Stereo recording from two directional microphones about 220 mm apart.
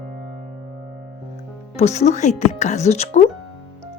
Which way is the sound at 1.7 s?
30° left (ahead or behind).